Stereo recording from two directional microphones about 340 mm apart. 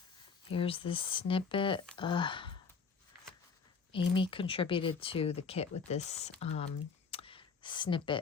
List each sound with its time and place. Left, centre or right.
0.4 s speech: centre
3.9 s speech: centre
7.1 s a sound: centre